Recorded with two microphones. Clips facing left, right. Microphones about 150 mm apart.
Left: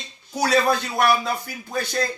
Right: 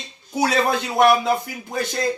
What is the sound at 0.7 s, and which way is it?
Speech, 20° right (ahead or behind).